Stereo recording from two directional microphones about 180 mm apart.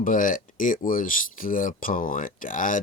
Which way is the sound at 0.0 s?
45° left (ahead or behind).